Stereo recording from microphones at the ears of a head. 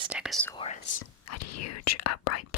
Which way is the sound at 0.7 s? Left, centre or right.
Left.